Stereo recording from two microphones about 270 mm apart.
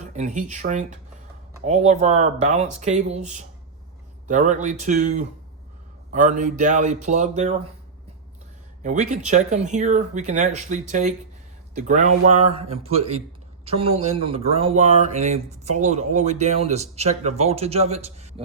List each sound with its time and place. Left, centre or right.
0.0 s speech: right
8.8 s speech: right